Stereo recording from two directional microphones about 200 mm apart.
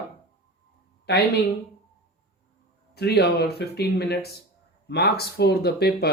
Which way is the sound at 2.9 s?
55° left (ahead or behind).